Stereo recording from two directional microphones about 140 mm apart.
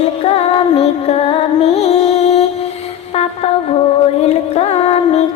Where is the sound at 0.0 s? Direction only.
45° left (ahead or behind).